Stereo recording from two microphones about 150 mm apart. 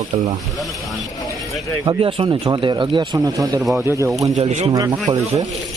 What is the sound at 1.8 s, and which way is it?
Speech, 30° right (ahead or behind).